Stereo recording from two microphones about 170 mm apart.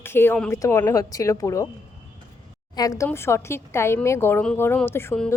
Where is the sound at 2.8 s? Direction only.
20° left (ahead or behind).